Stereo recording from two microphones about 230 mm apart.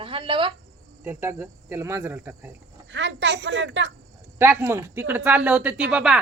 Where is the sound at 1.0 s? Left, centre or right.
Centre.